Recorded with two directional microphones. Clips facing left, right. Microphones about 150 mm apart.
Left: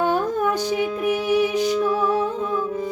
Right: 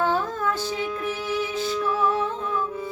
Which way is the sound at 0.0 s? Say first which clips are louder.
Left 4 dB; 15° left (ahead or behind).